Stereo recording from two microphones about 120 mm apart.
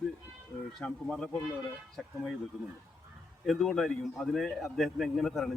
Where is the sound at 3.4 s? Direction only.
Centre (ahead or behind).